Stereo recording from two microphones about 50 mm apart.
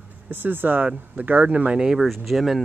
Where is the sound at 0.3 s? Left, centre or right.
Right.